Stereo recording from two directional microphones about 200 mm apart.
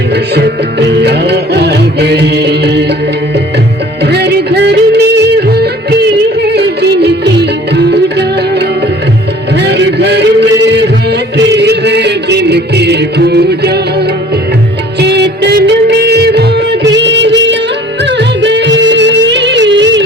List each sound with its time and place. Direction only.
0.3 s music: 55° right (ahead or behind)
4.0 s yodeling: 55° right (ahead or behind)
9.6 s a sound: 60° right (ahead or behind)
11.3 s music: 60° right (ahead or behind)
14.9 s music: 55° right (ahead or behind)